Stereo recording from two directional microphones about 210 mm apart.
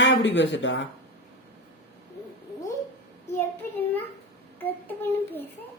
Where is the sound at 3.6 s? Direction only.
10° left (ahead or behind).